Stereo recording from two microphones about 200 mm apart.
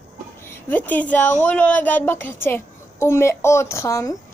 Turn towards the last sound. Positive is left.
turn(degrees=15)  # may be behind; listen again after turning